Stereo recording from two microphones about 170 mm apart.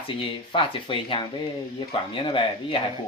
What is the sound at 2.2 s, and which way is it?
Speech, 30° left (ahead or behind).